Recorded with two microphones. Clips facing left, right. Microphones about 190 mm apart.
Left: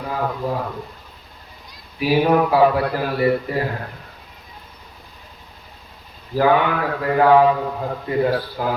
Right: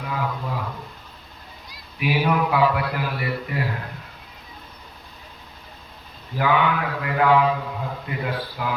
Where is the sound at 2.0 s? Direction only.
40° left (ahead or behind).